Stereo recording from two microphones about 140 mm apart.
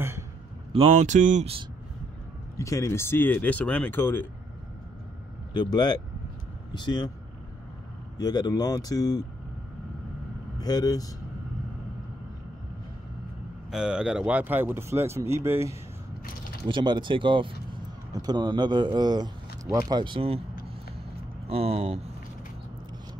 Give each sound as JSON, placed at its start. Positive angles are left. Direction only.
{"t": 0.7, "sound": "speech", "side_deg": -50}
{"t": 2.5, "sound": "speech", "side_deg": 20}
{"t": 5.5, "sound": "speech", "side_deg": 30}
{"t": 8.2, "sound": "speech", "side_deg": 30}
{"t": 10.6, "sound": "speech", "side_deg": 30}
{"t": 13.7, "sound": "speech", "side_deg": -5}
{"t": 16.6, "sound": "speech", "side_deg": -35}
{"t": 21.5, "sound": "speech", "side_deg": -45}